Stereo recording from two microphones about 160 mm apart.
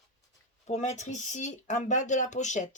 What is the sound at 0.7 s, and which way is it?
Speech, 45° left (ahead or behind).